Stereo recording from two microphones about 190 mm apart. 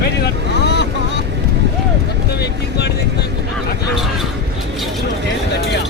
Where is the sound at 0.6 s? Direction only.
65° left (ahead or behind).